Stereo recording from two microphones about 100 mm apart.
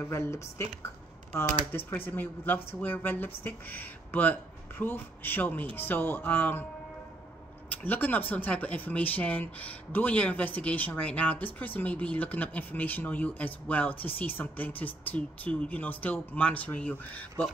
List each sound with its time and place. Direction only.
0.0 s speech: 25° left (ahead or behind)
1.7 s speech: 20° left (ahead or behind)
7.7 s speech: 15° left (ahead or behind)